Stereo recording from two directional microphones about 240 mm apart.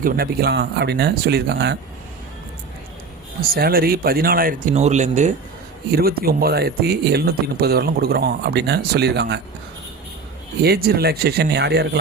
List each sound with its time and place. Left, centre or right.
0.0 s speech: right
3.5 s speech: right
10.6 s speech: right